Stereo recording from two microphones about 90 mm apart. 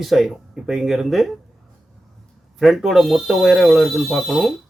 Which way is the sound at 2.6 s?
5° right (ahead or behind).